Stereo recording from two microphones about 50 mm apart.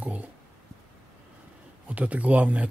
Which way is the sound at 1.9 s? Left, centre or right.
Right.